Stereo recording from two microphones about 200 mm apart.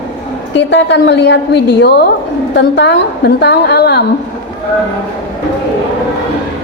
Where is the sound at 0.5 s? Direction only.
60° left (ahead or behind).